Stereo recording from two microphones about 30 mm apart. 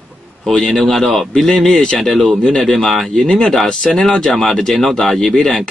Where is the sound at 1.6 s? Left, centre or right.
Left.